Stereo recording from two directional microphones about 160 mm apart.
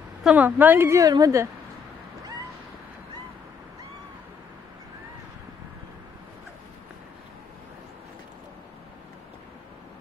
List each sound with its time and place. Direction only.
0.2 s a woman's voice: 5° right (ahead or behind)